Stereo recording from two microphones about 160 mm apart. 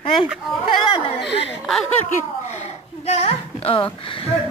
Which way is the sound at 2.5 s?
45° left (ahead or behind).